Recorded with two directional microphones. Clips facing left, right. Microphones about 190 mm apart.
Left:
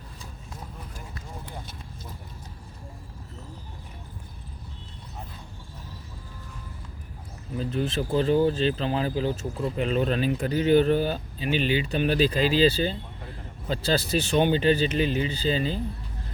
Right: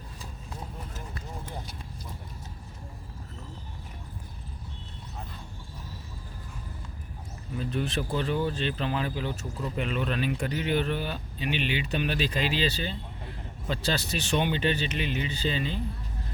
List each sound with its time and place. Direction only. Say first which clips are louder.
7.6 s speech: left 3 dB; 30° left (ahead or behind)